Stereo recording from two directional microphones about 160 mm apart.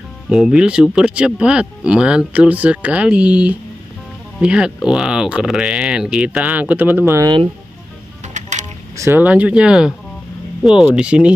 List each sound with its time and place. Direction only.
0.3 s speech: 5° right (ahead or behind)
8.3 s music: 50° right (ahead or behind)
8.9 s speech: 15° right (ahead or behind)